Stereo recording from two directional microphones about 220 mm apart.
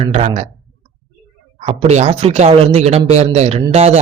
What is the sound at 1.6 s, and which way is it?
Speech, 30° right (ahead or behind).